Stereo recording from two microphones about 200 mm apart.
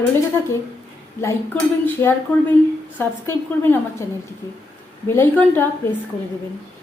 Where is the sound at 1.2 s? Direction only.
10° left (ahead or behind).